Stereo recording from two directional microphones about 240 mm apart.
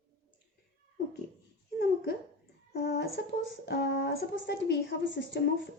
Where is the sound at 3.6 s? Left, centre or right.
Left.